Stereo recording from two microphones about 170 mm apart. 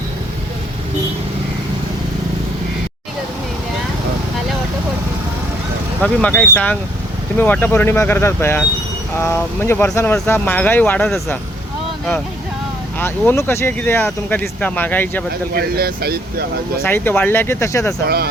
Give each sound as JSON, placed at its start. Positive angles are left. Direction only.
{"t": 6.0, "sound": "speech", "side_deg": 5}
{"t": 13.0, "sound": "speech", "side_deg": 15}
{"t": 15.5, "sound": "speech", "side_deg": -65}
{"t": 16.8, "sound": "speech", "side_deg": 10}